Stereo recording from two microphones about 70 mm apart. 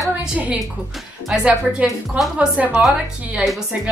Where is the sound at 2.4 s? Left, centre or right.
Centre.